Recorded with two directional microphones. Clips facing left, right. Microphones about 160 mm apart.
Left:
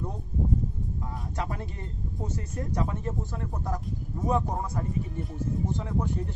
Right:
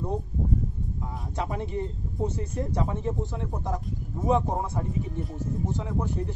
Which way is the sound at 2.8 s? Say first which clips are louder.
Right 2 dB; 15° right (ahead or behind).